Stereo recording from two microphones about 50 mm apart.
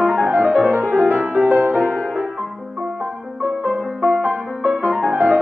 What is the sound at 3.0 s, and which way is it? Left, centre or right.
Music, right.